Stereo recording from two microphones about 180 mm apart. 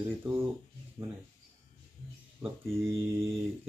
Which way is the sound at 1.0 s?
25° right (ahead or behind).